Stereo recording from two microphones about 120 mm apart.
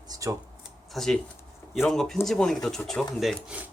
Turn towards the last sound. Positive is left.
turn(degrees=0)  # may be behind; listen again after turning